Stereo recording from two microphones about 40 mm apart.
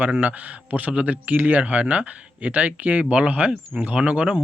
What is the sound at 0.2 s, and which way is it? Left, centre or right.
Speech, right.